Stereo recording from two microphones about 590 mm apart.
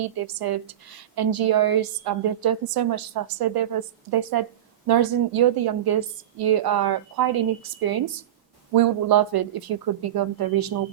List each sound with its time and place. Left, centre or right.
0.0 s a woman's voice: right